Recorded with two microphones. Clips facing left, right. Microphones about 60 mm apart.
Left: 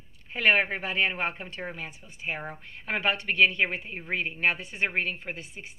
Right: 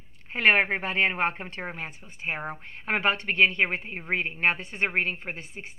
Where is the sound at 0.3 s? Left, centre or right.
Right.